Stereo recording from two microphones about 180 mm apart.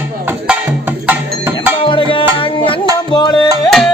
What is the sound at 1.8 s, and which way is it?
Music, 30° left (ahead or behind).